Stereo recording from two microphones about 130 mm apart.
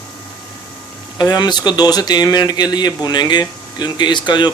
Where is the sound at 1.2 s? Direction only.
35° left (ahead or behind).